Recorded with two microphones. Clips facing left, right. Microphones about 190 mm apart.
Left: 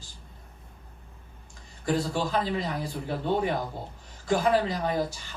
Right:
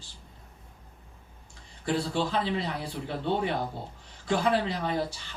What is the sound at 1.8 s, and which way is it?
A man's voice, 45° left (ahead or behind).